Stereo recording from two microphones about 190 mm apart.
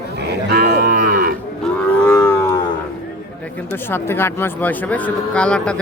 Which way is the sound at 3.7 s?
10° left (ahead or behind).